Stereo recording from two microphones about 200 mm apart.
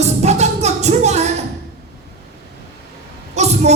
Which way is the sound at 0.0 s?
35° right (ahead or behind).